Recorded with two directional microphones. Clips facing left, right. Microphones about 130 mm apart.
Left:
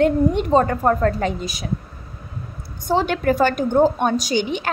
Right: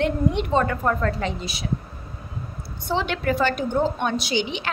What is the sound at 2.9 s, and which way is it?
A woman's voice, 45° left (ahead or behind).